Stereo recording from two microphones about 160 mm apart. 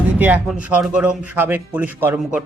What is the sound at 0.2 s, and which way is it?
Speech, 10° right (ahead or behind).